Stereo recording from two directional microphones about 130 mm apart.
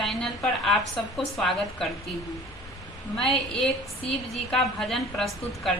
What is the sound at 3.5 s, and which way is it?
A woman's voice, 5° left (ahead or behind).